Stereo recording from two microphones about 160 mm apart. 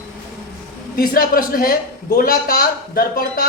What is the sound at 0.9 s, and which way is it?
Speech, 65° left (ahead or behind).